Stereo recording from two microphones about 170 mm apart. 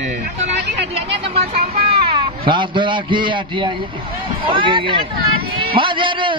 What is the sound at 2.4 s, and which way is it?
A man's voice, 30° right (ahead or behind).